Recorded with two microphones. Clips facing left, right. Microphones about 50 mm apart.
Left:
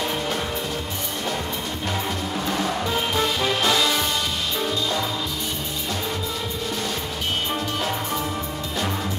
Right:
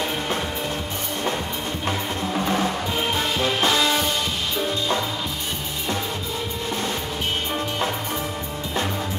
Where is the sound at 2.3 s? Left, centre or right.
Centre.